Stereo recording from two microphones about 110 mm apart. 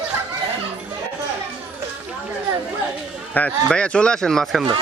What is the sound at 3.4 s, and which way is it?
A man's voice, 15° left (ahead or behind).